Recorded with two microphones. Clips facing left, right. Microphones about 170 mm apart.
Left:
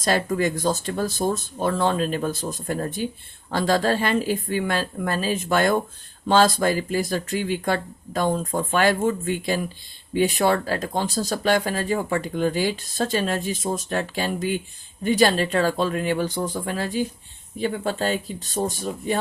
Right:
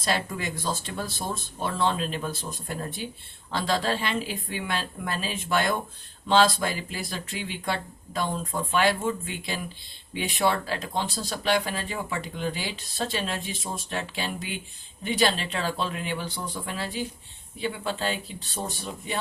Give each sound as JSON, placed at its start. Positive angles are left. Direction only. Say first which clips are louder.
{"t": 0.0, "sound": "speech", "louder": "left 7 dB", "side_deg": 45}